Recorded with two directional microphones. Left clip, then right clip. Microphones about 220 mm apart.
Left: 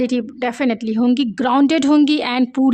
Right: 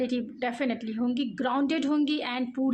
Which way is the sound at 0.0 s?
45° left (ahead or behind).